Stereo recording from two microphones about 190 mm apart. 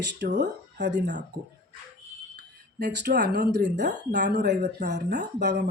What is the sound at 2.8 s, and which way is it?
Speech, 55° right (ahead or behind).